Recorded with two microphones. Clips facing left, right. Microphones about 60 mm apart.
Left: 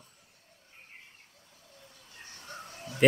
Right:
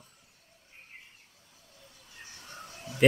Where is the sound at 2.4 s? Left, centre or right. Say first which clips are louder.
Left 2 dB; left.